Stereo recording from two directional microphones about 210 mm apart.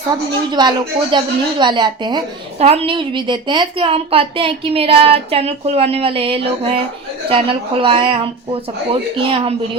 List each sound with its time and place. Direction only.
0.6 s a woman's voice: 20° right (ahead or behind)